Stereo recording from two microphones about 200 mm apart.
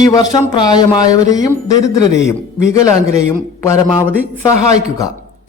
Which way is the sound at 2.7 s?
15° left (ahead or behind).